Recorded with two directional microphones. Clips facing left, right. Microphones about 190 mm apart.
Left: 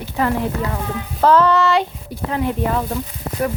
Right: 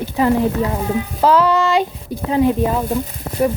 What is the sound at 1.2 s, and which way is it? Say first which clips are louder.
Speech: even; 10° right (ahead or behind).